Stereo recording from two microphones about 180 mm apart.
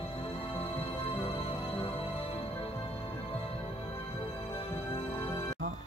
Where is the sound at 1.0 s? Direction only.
30° left (ahead or behind).